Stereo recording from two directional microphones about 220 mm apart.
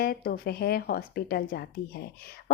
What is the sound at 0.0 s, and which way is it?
A woman's voice, 45° left (ahead or behind).